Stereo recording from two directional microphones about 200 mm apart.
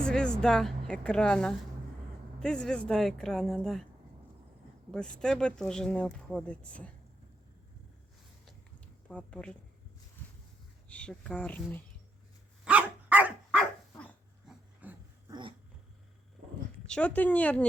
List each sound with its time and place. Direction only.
0.0 s speech: 5° left (ahead or behind)
4.9 s speech: 5° left (ahead or behind)
9.0 s speech: 5° left (ahead or behind)
10.8 s speech: 5° left (ahead or behind)
12.6 s dog: 5° right (ahead or behind)
14.8 s dog: 10° right (ahead or behind)
15.3 s dog: 25° right (ahead or behind)
16.8 s speech: 5° left (ahead or behind)